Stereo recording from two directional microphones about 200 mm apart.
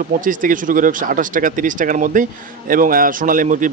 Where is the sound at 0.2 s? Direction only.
40° right (ahead or behind).